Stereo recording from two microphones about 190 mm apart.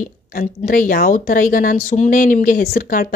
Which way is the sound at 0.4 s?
50° left (ahead or behind).